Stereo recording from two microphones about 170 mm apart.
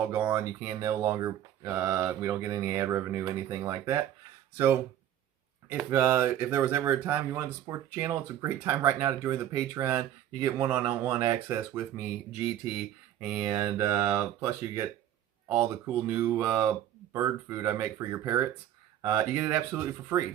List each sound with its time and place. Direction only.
0.0 s speech: 15° right (ahead or behind)
13.1 s speech: 5° right (ahead or behind)